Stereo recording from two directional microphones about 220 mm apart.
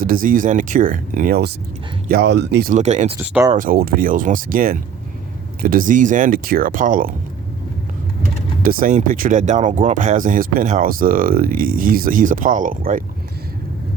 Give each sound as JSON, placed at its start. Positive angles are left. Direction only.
{"t": 0.0, "sound": "speech", "side_deg": -40}
{"t": 2.7, "sound": "speech", "side_deg": -35}
{"t": 3.2, "sound": "speech", "side_deg": -10}
{"t": 3.6, "sound": "speech", "side_deg": -40}
{"t": 8.6, "sound": "speech", "side_deg": -40}